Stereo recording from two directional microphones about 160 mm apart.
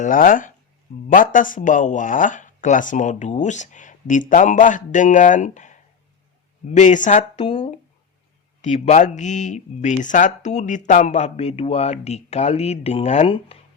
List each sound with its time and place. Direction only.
0.0 s speech: 60° left (ahead or behind); by 13.6 s 35° left (ahead or behind)